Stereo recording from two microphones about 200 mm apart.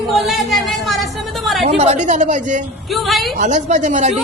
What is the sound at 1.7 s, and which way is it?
Speech, 35° right (ahead or behind).